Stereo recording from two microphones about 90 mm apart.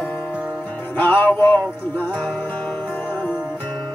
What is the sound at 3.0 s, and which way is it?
Music, 20° left (ahead or behind).